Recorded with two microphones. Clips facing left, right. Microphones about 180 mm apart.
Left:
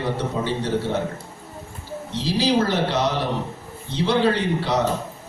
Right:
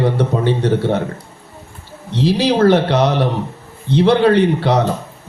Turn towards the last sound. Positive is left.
turn(degrees=-65)  # may be behind; listen again after turning